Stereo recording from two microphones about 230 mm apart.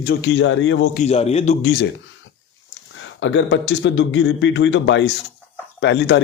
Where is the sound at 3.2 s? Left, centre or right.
Left.